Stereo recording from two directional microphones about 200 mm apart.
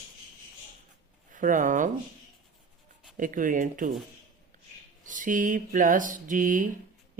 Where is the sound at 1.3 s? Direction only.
40° right (ahead or behind).